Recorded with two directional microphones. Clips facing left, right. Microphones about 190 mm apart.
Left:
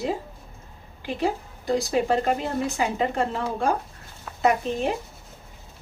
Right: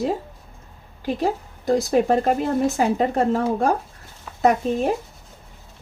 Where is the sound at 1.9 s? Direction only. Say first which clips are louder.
Right 4 dB; 45° right (ahead or behind).